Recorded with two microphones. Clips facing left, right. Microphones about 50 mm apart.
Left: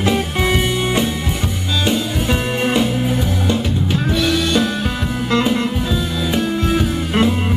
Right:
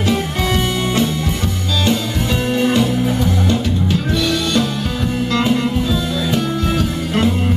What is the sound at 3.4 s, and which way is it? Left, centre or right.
Music, centre.